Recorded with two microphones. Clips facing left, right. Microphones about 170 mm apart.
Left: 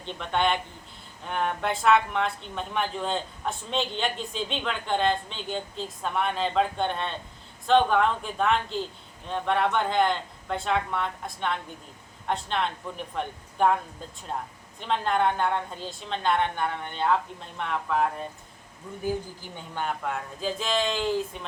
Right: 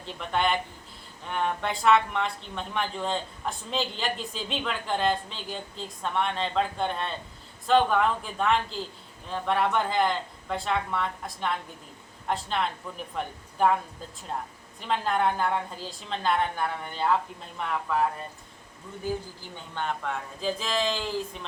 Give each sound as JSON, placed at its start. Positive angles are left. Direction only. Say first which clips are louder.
{"t": 0.0, "sound": "a woman's voice", "louder": "left 1 dB", "side_deg": -5}
{"t": 14.8, "sound": "a woman's voice", "louder": "left 1 dB", "side_deg": -5}
{"t": 19.7, "sound": "a woman's voice", "louder": "left 1 dB", "side_deg": 0}